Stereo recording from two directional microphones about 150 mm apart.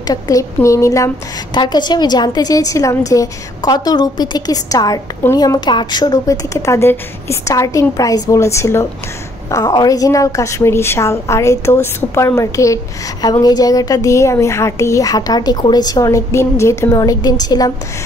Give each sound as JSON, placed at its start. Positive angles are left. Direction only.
{"t": 0.0, "sound": "a woman's voice", "side_deg": 25}